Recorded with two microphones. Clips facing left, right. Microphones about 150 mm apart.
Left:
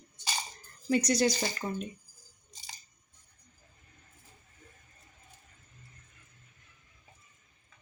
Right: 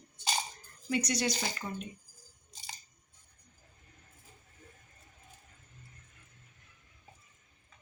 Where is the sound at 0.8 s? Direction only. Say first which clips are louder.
Left 5 dB; 35° left (ahead or behind).